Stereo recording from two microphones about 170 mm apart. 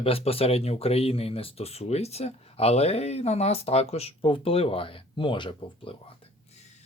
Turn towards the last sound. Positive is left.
turn(degrees=35)  # may be behind; listen again after turning